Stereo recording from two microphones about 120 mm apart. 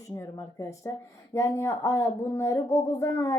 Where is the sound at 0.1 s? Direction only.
30° left (ahead or behind).